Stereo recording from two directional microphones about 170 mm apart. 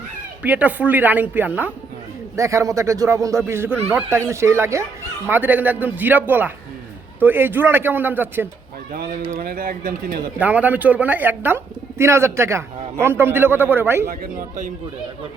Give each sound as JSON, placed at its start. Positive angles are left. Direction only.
{"t": 0.4, "sound": "speech", "side_deg": -10}
{"t": 8.9, "sound": "speech", "side_deg": -60}
{"t": 10.4, "sound": "speech", "side_deg": -10}
{"t": 14.1, "sound": "speech", "side_deg": -55}